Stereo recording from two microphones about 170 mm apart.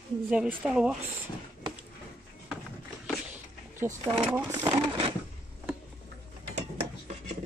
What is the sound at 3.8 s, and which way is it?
Speech, 10° right (ahead or behind).